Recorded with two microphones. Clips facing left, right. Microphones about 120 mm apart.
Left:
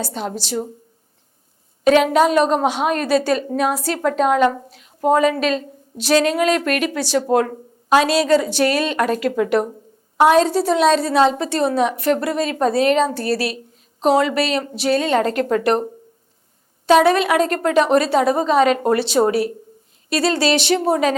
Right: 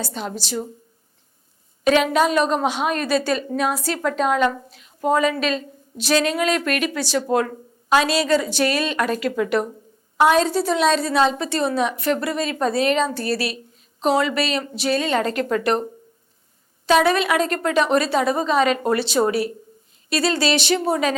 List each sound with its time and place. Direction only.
0.0 s speech: 40° left (ahead or behind)
2.0 s a woman's voice: 55° left (ahead or behind)
7.2 s speech: 40° left (ahead or behind)
7.9 s a woman's voice: 55° left (ahead or behind)
16.8 s a woman's voice: 50° left (ahead or behind)
20.7 s a woman's voice: 45° left (ahead or behind)